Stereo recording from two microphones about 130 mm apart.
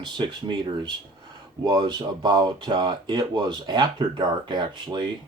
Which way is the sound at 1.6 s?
35° right (ahead or behind).